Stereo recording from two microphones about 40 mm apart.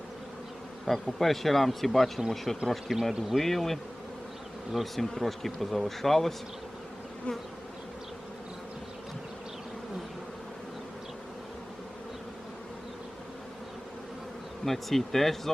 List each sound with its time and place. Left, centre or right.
0.9 s speech: centre
7.3 s bee: left
14.6 s speech: centre